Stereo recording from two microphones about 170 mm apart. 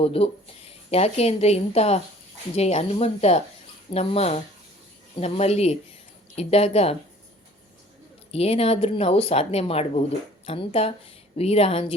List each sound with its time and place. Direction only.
0.0 s speech: 35° left (ahead or behind)
8.3 s speech: 35° left (ahead or behind)